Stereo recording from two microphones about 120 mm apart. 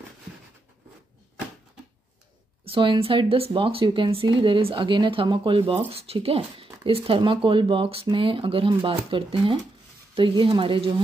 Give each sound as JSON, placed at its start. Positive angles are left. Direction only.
{"t": 2.6, "sound": "speech", "side_deg": -50}